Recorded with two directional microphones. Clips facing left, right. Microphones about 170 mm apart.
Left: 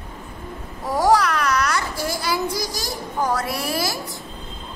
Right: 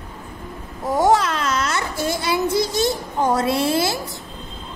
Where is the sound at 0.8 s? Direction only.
25° right (ahead or behind).